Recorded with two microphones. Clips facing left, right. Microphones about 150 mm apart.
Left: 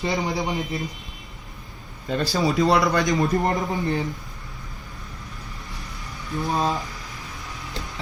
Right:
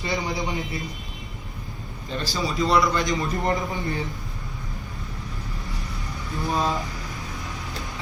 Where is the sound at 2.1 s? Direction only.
45° left (ahead or behind).